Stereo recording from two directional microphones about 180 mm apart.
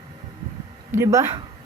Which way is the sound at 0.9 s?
15° right (ahead or behind).